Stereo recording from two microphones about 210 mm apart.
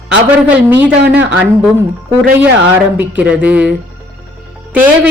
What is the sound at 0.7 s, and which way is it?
Speech, 10° right (ahead or behind).